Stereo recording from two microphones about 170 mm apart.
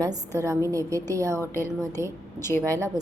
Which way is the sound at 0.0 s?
20° right (ahead or behind).